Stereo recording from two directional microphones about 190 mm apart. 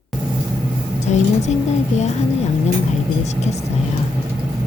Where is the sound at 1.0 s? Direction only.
35° left (ahead or behind).